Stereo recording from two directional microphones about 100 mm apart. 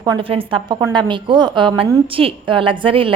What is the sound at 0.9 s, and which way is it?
A woman's voice, 50° right (ahead or behind).